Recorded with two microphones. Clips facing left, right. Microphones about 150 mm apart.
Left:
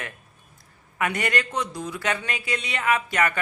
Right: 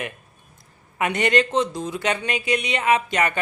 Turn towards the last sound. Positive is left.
turn(degrees=-20)  # may be behind; listen again after turning